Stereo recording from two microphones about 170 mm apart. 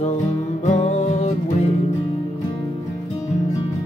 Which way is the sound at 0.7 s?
40° left (ahead or behind).